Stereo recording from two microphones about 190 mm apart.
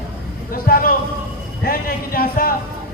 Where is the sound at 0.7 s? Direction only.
50° left (ahead or behind).